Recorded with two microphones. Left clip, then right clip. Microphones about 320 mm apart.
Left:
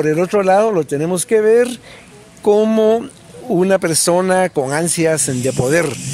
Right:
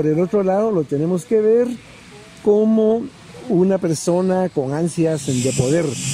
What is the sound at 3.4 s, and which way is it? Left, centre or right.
A man's voice, left.